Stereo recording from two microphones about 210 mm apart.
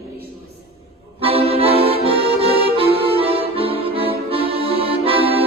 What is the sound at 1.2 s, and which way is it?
Accordion, 25° right (ahead or behind).